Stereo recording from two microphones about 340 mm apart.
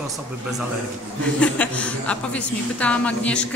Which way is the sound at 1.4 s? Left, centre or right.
Centre.